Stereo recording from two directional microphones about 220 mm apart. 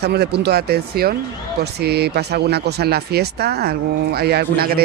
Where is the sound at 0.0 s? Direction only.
50° right (ahead or behind).